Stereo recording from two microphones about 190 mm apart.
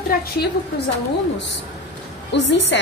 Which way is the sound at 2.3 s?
70° left (ahead or behind).